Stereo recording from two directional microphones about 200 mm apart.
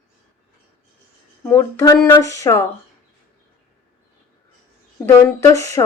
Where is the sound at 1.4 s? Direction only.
10° left (ahead or behind).